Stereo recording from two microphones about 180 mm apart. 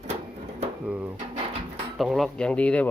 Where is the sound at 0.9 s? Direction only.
10° right (ahead or behind).